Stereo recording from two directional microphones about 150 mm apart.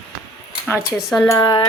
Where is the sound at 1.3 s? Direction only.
30° left (ahead or behind).